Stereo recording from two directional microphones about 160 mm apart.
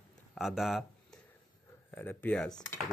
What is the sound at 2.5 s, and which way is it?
Speech, 25° left (ahead or behind).